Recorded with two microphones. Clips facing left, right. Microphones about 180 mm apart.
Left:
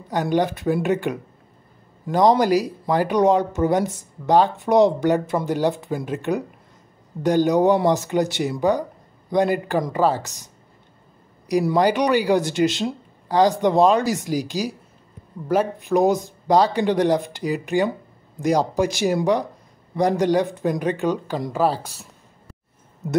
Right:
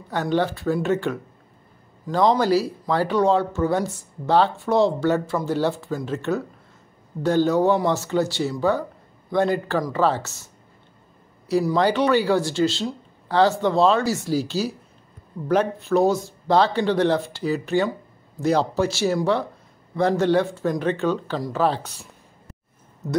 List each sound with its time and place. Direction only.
0.1 s speech: 15° left (ahead or behind)
2.3 s speech: 15° left (ahead or behind)
11.7 s speech: 10° left (ahead or behind)